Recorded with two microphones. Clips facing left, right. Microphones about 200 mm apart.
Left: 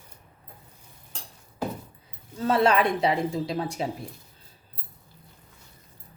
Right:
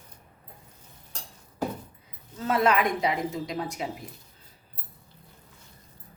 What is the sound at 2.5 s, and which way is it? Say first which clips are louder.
A woman's voice: left 2 dB; 30° left (ahead or behind).